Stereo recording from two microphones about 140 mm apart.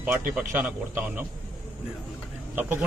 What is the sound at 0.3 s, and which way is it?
Speech, 10° right (ahead or behind).